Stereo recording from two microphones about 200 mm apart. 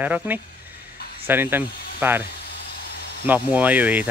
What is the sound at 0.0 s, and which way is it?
Speech, 10° right (ahead or behind).